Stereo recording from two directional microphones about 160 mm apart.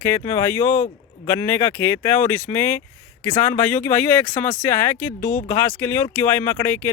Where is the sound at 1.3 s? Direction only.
15° left (ahead or behind).